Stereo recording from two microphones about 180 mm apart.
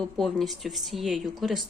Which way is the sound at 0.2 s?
Centre (ahead or behind).